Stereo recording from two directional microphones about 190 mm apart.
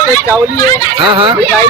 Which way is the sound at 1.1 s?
25° right (ahead or behind).